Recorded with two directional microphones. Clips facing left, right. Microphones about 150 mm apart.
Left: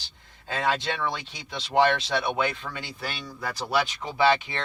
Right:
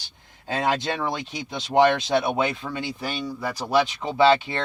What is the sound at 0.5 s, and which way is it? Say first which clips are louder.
Speech: right 3 dB; 40° right (ahead or behind).